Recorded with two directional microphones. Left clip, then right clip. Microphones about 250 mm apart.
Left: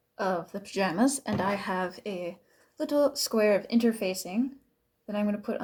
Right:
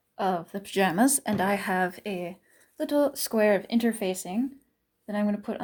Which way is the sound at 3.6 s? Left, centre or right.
Right.